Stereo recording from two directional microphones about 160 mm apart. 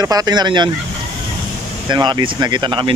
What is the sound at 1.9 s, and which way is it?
Speech, 30° right (ahead or behind).